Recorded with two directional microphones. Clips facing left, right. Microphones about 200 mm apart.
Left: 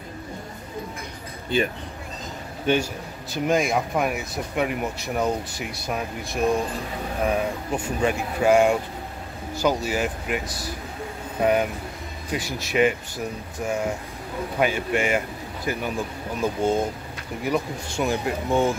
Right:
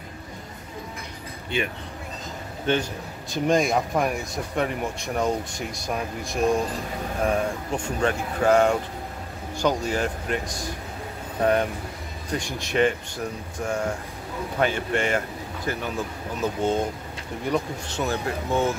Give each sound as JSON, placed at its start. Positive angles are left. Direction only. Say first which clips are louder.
{"t": 1.5, "sound": "speech", "louder": "left 4 dB", "side_deg": 35}
{"t": 2.6, "sound": "a man's voice", "louder": "left 2 dB", "side_deg": 15}
{"t": 3.3, "sound": "a man's voice", "louder": "right 1 dB", "side_deg": 0}